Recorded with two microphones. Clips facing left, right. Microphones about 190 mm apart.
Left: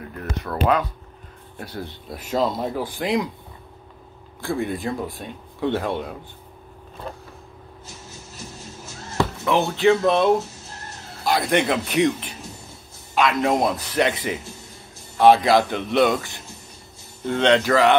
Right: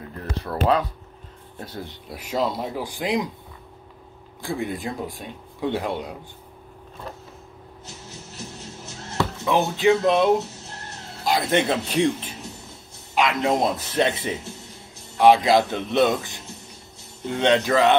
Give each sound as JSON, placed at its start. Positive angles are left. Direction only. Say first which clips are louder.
{"t": 0.1, "sound": "speech", "louder": "even", "side_deg": -30}
{"t": 4.4, "sound": "a man's voice", "louder": "left 3 dB", "side_deg": -15}
{"t": 9.4, "sound": "speech", "louder": "left 1 dB", "side_deg": -15}
{"t": 11.2, "sound": "a man's voice", "louder": "left 1 dB", "side_deg": -20}
{"t": 15.1, "sound": "a man's voice", "louder": "left 1 dB", "side_deg": -15}